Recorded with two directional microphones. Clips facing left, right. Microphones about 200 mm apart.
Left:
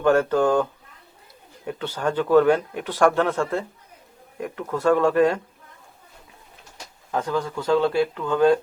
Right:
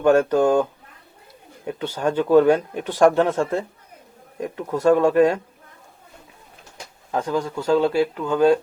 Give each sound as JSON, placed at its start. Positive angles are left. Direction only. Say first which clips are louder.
{"t": 0.0, "sound": "speech", "louder": "right 2 dB", "side_deg": -15}
{"t": 7.1, "sound": "speech", "louder": "right 2 dB", "side_deg": -20}